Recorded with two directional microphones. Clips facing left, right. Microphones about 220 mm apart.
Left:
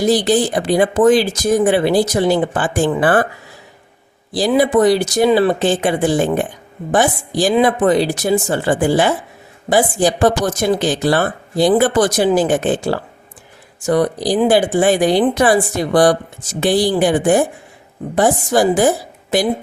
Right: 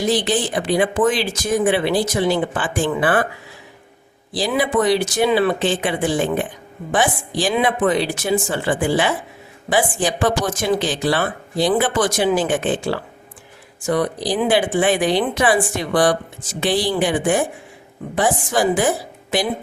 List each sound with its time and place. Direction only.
0.0 s speech: 40° left (ahead or behind)
4.4 s speech: 40° left (ahead or behind)